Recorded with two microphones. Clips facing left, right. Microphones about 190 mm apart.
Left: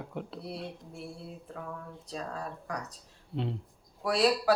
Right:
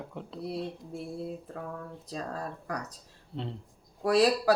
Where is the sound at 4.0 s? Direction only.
40° right (ahead or behind).